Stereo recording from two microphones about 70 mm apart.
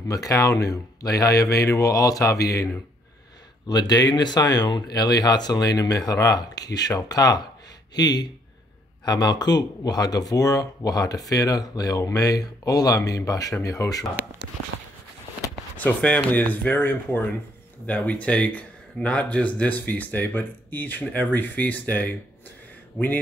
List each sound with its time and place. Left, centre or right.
0.1 s speech: left
3.6 s speech: left
8.0 s speech: left
15.8 s speech: left